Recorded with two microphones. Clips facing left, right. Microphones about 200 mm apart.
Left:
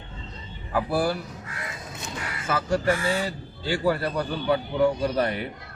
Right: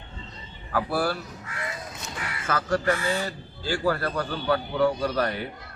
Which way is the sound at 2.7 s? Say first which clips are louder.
Left 1 dB; 10° left (ahead or behind).